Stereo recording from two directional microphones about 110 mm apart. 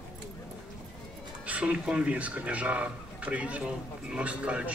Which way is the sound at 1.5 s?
10° right (ahead or behind).